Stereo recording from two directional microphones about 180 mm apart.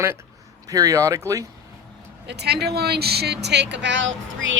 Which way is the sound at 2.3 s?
65° right (ahead or behind).